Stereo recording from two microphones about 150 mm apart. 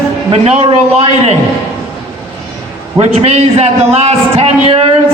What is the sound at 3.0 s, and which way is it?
A man's voice, 45° right (ahead or behind).